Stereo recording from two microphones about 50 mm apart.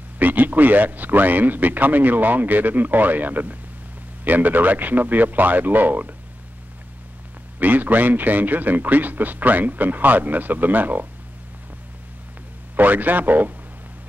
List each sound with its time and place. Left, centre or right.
0.2 s a man's voice: right
7.5 s a man's voice: right
12.7 s a man's voice: right